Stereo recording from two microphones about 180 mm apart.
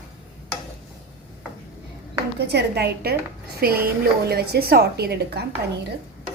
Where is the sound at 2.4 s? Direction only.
65° right (ahead or behind).